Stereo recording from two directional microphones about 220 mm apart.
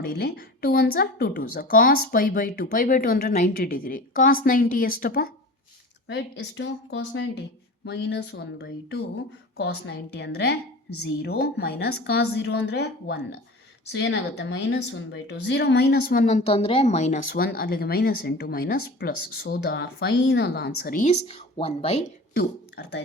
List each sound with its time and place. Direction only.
0.0 s a woman's voice: 45° left (ahead or behind); by 21.9 s 25° left (ahead or behind)
22.4 s speech: 50° left (ahead or behind)